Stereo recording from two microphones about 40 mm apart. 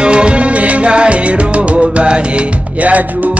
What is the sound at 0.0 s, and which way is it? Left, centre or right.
Music, right.